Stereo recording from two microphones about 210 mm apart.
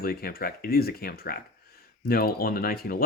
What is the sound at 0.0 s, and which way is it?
Speech, 45° left (ahead or behind).